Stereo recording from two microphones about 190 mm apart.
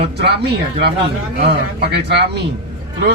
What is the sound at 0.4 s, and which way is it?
A man's voice, 60° right (ahead or behind).